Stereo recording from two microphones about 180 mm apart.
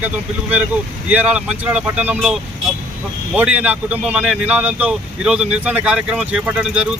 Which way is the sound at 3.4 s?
5° right (ahead or behind).